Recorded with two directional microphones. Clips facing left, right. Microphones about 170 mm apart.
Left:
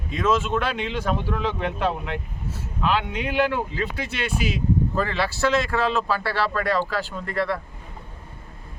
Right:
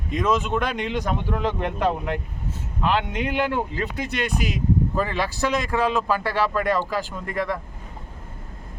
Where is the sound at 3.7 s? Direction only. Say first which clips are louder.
Right 1 dB; 15° right (ahead or behind).